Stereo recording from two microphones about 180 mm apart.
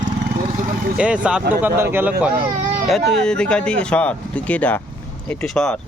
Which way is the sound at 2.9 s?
Centre (ahead or behind).